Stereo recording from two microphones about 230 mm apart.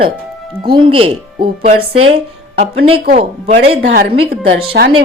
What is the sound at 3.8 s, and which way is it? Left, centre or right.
A woman's voice, right.